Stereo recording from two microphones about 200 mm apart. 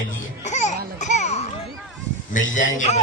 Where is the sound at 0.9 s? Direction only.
35° left (ahead or behind).